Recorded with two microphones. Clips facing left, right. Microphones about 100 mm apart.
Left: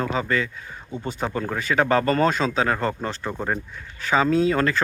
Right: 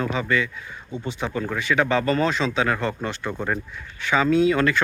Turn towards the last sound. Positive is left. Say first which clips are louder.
# right 1 dB
turn(degrees=35)  # may be behind; listen again after turning